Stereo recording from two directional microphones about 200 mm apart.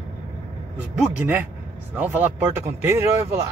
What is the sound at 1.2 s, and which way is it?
Speech, 10° right (ahead or behind).